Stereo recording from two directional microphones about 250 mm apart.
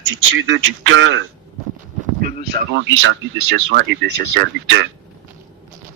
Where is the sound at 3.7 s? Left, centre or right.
Right.